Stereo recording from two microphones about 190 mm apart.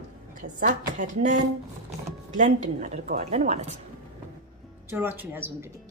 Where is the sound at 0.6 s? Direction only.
40° right (ahead or behind).